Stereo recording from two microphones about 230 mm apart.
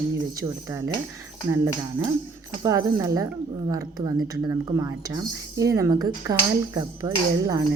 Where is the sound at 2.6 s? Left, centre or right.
Centre.